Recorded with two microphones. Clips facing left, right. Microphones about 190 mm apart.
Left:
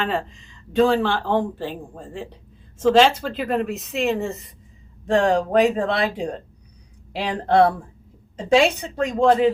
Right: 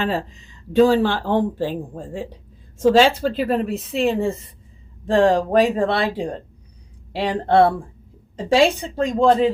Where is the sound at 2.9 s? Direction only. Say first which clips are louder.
Left 1 dB; 40° right (ahead or behind).